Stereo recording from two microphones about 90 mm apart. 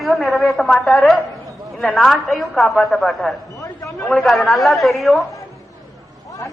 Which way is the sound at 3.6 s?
35° left (ahead or behind).